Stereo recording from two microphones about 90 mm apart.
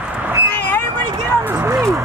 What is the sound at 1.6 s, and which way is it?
Speech, 30° right (ahead or behind).